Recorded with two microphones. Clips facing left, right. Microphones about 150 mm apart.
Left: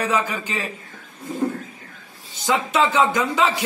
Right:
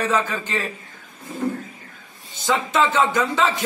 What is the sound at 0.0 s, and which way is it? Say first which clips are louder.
Speech: even; 10° left (ahead or behind).